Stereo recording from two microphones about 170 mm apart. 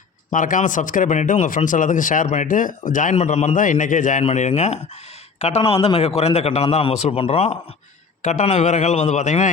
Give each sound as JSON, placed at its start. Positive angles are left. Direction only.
{"t": 0.3, "sound": "a man's voice", "side_deg": 50}